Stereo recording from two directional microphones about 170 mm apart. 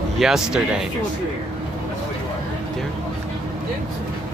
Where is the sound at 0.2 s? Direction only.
Centre (ahead or behind).